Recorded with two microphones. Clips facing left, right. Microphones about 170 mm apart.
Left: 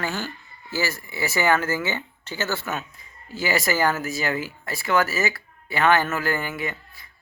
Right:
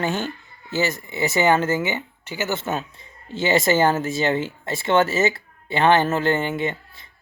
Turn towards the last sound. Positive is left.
turn(degrees=-25)  # may be behind; listen again after turning